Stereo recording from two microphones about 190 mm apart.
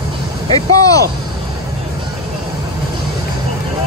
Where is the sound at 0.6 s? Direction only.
20° left (ahead or behind).